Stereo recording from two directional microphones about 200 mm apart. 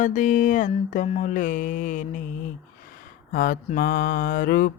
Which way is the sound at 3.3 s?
45° left (ahead or behind).